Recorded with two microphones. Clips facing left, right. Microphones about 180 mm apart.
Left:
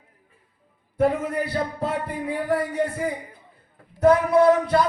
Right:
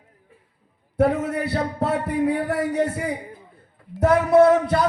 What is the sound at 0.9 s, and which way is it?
A man's voice, 75° right (ahead or behind).